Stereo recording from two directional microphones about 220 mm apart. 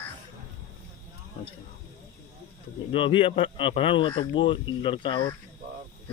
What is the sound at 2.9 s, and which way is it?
A man's voice, 25° left (ahead or behind).